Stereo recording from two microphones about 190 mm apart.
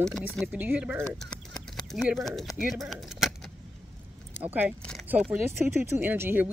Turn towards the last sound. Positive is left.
turn(degrees=-10)  # may be behind; listen again after turning